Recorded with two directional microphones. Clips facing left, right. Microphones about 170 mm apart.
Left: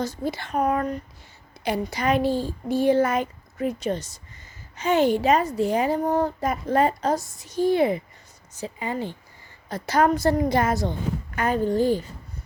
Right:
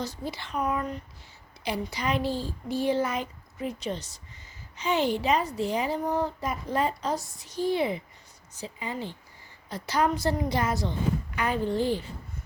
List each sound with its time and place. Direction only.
0.0 s a woman's voice: 45° left (ahead or behind)